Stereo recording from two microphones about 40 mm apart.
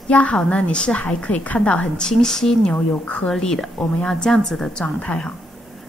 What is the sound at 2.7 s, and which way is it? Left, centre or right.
Speech, left.